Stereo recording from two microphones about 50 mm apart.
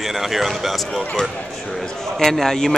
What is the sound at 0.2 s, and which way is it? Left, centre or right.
Speech, centre.